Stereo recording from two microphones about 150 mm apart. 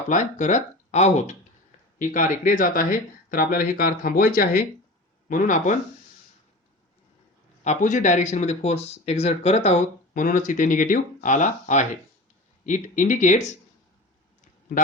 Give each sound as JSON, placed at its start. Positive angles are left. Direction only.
{"t": 0.1, "sound": "speech", "side_deg": 55}
{"t": 2.0, "sound": "speech", "side_deg": 60}
{"t": 7.6, "sound": "speech", "side_deg": 55}
{"t": 10.2, "sound": "speech", "side_deg": 60}